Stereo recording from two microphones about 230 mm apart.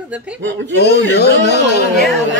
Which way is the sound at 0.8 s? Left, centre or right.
Left.